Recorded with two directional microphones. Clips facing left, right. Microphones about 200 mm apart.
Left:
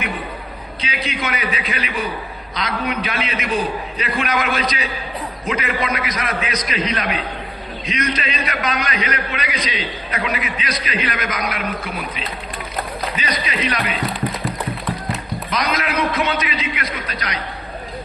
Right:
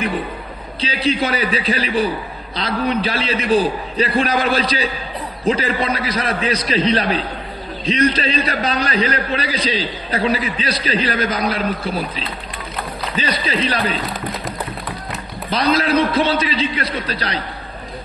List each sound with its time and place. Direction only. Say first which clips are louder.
0.7 s a man's voice: right 8 dB; 30° right (ahead or behind)
15.5 s a man's voice: right 6 dB; 30° right (ahead or behind)